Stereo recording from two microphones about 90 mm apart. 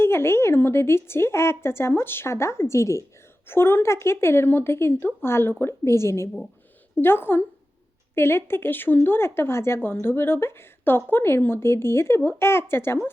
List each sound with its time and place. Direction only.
0.0 s speech: 25° left (ahead or behind)